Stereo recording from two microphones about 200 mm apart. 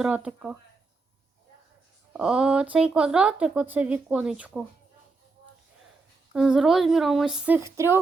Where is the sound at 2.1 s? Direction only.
5° right (ahead or behind).